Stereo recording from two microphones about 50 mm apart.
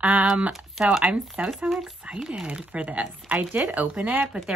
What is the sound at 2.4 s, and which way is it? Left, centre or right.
Speech, right.